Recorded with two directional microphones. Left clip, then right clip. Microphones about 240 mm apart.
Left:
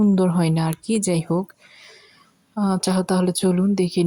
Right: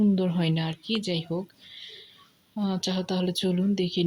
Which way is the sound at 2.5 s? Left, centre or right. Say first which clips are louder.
Left 7 dB; left.